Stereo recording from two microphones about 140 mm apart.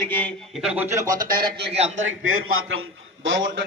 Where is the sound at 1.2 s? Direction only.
90° right.